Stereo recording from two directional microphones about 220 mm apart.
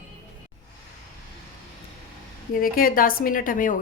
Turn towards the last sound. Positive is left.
turn(degrees=35)  # may be behind; listen again after turning